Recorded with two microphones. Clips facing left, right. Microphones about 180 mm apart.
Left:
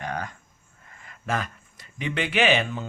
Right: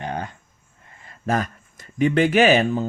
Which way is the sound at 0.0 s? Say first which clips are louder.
Right 3 dB; 30° right (ahead or behind).